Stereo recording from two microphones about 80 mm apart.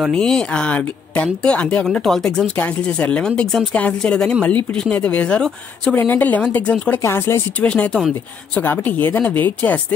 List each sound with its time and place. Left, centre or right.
0.1 s speech: centre
2.5 s speech: centre
7.0 s speech: left
7.6 s speech: centre